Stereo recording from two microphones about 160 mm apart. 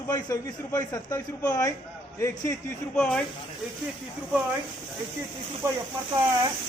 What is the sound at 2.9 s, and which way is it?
Speech, 5° left (ahead or behind).